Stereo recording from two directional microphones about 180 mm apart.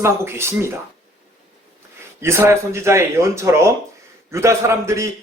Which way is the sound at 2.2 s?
15° right (ahead or behind).